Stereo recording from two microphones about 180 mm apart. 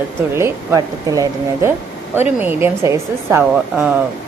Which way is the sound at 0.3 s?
15° right (ahead or behind).